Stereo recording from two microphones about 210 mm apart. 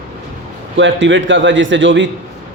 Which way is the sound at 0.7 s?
60° right (ahead or behind).